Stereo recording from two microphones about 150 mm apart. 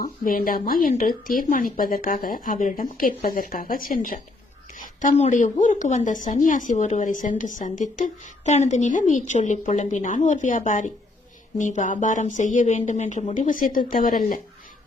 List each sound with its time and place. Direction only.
0.0 s speech: 70° left (ahead or behind)
4.9 s a woman's voice: 50° left (ahead or behind)